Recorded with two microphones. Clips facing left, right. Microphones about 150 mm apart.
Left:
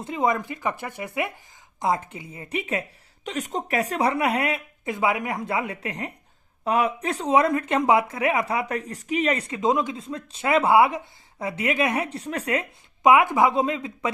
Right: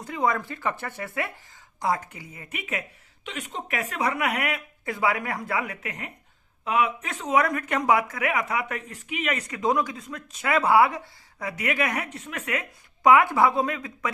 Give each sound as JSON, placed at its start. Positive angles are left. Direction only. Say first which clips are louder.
{"t": 0.0, "sound": "a woman's voice", "louder": "left 2 dB", "side_deg": 20}
{"t": 13.0, "sound": "speech", "louder": "left 1 dB", "side_deg": 20}